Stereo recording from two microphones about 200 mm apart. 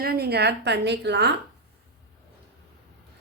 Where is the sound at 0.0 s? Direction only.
50° right (ahead or behind).